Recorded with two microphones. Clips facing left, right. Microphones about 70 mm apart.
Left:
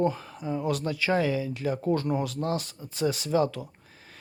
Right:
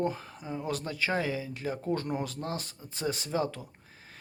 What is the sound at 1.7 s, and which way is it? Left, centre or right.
Speech, left.